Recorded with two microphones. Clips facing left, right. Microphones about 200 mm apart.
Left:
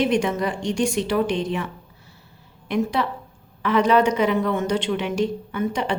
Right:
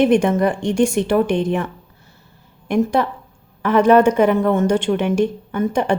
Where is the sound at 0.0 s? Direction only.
55° right (ahead or behind).